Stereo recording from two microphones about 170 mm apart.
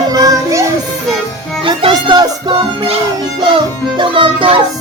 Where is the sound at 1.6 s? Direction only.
30° right (ahead or behind).